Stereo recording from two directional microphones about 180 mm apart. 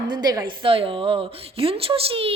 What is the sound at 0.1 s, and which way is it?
Speech, 20° right (ahead or behind).